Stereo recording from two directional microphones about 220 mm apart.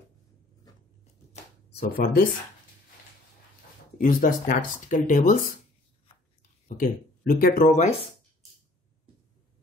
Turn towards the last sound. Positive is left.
turn(degrees=30)  # may be behind; listen again after turning